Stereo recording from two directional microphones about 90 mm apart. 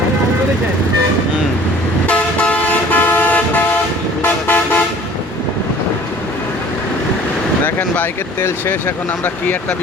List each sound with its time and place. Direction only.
2.0 s toot: 15° left (ahead or behind)
7.6 s vehicle: 20° left (ahead or behind)
9.2 s speech: 20° left (ahead or behind)